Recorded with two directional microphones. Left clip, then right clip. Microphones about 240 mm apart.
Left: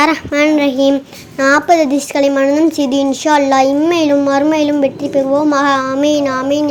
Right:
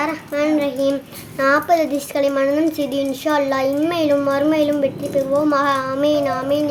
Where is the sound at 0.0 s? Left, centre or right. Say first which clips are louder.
Left 8 dB; left.